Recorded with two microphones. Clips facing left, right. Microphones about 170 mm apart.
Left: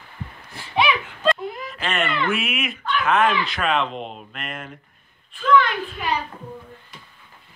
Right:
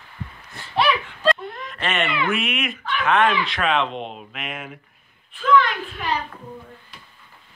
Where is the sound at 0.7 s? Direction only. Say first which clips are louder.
Even; centre (ahead or behind).